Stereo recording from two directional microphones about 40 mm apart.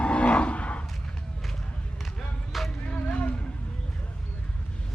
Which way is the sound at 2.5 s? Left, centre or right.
Centre.